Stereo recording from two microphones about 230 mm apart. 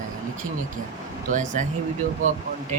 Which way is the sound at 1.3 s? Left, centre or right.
Right.